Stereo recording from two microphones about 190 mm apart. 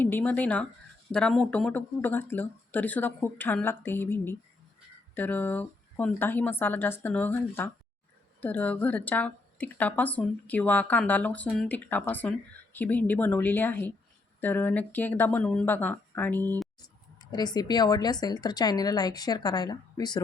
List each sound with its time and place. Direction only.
0.0 s a woman's voice: 10° left (ahead or behind)
16.8 s speech: 20° left (ahead or behind)